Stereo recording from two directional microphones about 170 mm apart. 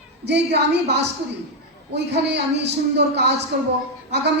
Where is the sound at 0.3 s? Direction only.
90° right.